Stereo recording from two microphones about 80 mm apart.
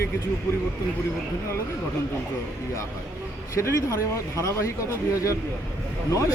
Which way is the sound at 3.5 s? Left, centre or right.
Left.